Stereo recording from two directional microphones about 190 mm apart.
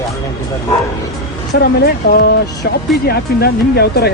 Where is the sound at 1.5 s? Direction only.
55° left (ahead or behind).